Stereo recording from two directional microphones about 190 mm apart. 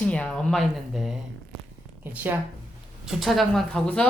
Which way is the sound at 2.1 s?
10° right (ahead or behind).